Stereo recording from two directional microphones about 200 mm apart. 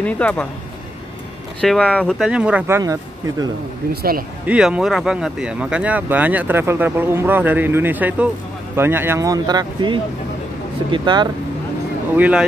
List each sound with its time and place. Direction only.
0.0 s speech: 5° left (ahead or behind)
1.6 s speech: 5° left (ahead or behind); by 3.4 s 15° right (ahead or behind)
3.9 s speech: 50° right (ahead or behind)
4.5 s speech: 5° right (ahead or behind); by 11.2 s 20° right (ahead or behind)
12.2 s speech: 5° right (ahead or behind)